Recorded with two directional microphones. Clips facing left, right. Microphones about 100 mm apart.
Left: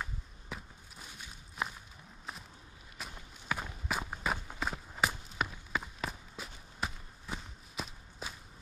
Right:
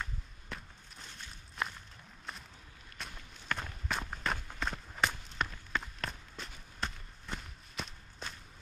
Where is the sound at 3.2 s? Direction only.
10° left (ahead or behind).